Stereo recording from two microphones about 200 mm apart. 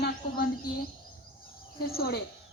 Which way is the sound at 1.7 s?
50° left (ahead or behind).